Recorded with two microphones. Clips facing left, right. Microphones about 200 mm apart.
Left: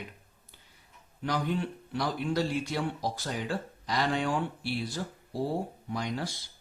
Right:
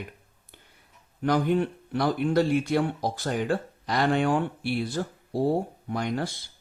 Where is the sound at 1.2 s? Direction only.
55° right (ahead or behind).